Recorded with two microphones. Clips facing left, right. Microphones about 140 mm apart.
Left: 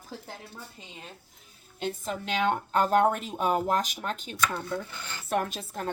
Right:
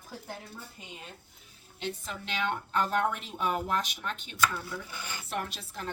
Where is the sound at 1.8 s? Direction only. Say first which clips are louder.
Left 5 dB; 45° left (ahead or behind).